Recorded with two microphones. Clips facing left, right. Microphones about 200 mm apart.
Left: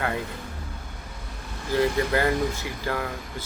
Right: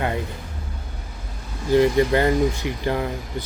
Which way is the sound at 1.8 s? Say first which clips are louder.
Right 3 dB; 20° right (ahead or behind).